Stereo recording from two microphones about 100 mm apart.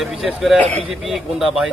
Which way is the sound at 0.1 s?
5° right (ahead or behind).